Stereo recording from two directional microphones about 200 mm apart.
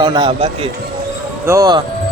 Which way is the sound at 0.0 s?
25° right (ahead or behind).